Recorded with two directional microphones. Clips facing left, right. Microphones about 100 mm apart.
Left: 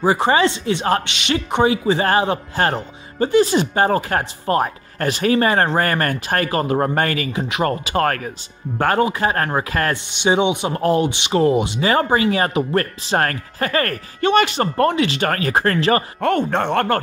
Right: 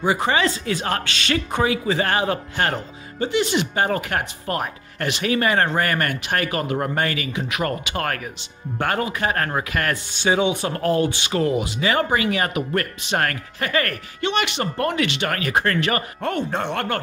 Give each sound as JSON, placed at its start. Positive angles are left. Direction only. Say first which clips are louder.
{"t": 0.0, "sound": "speech", "louder": "left 4 dB", "side_deg": 35}
{"t": 7.4, "sound": "speech", "louder": "left 4 dB", "side_deg": 30}
{"t": 10.1, "sound": "speech", "louder": "left 3 dB", "side_deg": 20}
{"t": 14.9, "sound": "speech", "louder": "left 4 dB", "side_deg": 30}
{"t": 15.1, "sound": "speech", "louder": "left 3 dB", "side_deg": 40}
{"t": 16.3, "sound": "speech", "louder": "left 4 dB", "side_deg": 55}